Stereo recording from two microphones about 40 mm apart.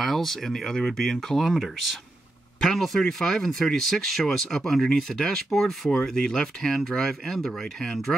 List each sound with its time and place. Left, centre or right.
0.0 s speech: centre
2.6 s speech: centre
6.1 s speech: centre